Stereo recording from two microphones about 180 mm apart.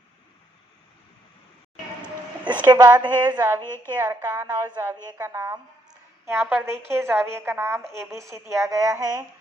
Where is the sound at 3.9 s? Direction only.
15° right (ahead or behind).